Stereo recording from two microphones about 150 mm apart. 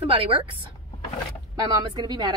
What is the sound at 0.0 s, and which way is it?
Speech, 35° right (ahead or behind).